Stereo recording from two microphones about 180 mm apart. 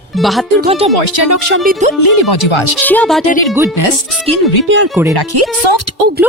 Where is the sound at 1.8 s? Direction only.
40° right (ahead or behind).